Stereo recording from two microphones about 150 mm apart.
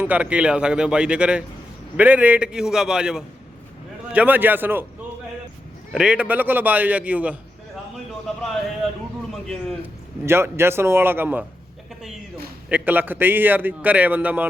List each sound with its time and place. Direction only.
0.0 s a man's voice: 10° right (ahead or behind)
5.9 s a man's voice: 5° right (ahead or behind)
9.3 s a man's voice: centre (ahead or behind)
10.2 s a man's voice: 15° right (ahead or behind)
12.6 s a man's voice: 10° right (ahead or behind)